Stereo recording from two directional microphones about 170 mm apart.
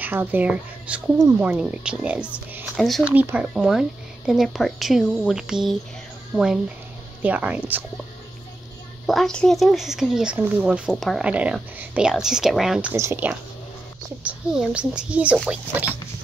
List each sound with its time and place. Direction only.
0.0 s a woman's voice: 10° right (ahead or behind)
3.1 s speech: 10° right (ahead or behind)
9.0 s speech: centre (ahead or behind)
12.9 s speech: 15° right (ahead or behind)